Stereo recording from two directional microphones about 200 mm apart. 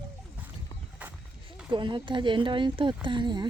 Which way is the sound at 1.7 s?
25° right (ahead or behind).